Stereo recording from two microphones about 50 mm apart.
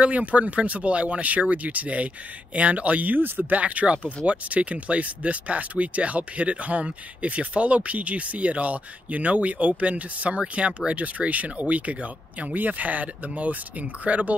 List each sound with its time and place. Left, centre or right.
0.0 s speech: right